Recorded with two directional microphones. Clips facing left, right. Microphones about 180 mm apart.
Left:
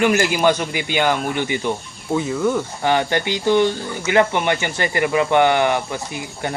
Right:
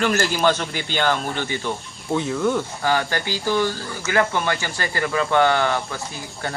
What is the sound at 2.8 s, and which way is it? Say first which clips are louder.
Speech: left 6 dB; 20° left (ahead or behind).